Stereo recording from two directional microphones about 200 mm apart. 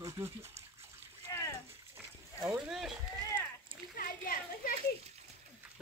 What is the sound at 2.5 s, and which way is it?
Speech, 5° right (ahead or behind).